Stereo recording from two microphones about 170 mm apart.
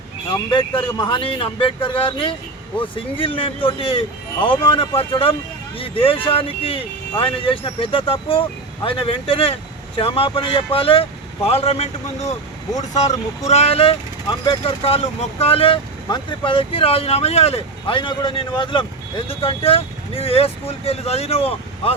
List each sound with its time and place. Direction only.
0.3 s speech: 25° left (ahead or behind)
13.5 s speech: 35° left (ahead or behind)